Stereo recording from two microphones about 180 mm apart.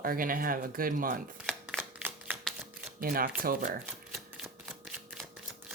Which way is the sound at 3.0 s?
55° right (ahead or behind).